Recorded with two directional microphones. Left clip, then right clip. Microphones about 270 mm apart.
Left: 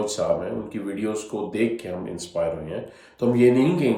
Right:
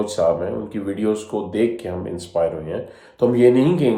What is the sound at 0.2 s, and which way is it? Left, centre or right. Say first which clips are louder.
Speech: right 7 dB; centre.